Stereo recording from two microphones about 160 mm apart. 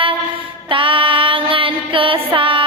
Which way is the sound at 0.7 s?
30° right (ahead or behind).